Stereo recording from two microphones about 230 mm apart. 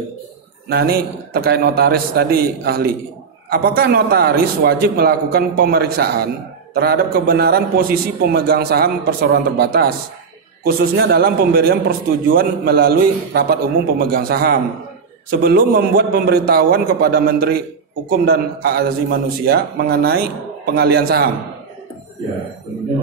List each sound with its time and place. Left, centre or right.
0.7 s a man's voice: right